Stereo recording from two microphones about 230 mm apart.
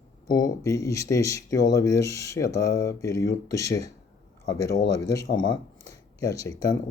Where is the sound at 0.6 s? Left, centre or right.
Centre.